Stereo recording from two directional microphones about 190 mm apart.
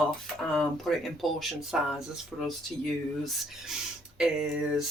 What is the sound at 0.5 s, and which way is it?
Speech, centre (ahead or behind).